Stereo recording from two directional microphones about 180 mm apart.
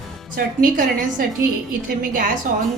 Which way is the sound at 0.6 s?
50° right (ahead or behind).